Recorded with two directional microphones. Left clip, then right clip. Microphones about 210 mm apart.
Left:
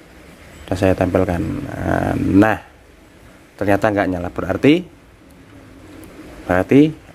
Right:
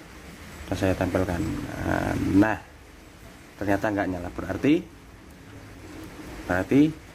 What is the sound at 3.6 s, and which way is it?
A man's voice, 40° left (ahead or behind).